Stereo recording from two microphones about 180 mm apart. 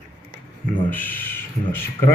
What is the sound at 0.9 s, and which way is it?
Speech, 10° left (ahead or behind).